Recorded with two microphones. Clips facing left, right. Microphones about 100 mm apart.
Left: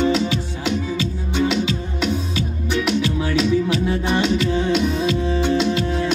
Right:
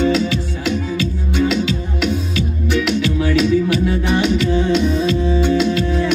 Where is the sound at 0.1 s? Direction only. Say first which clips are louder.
Right 2 dB; 20° left (ahead or behind).